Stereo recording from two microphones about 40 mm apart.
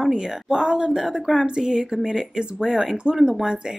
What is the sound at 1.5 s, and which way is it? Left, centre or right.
Speech, centre.